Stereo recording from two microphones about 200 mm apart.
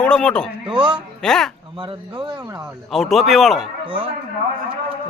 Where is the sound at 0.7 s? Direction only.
25° right (ahead or behind).